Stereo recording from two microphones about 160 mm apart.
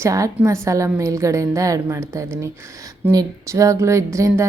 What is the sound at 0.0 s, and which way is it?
A woman's voice, 20° right (ahead or behind).